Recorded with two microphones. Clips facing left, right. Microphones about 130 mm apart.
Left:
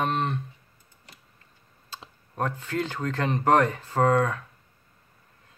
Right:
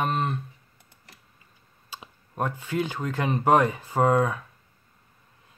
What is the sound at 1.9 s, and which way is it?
Speech, 10° right (ahead or behind).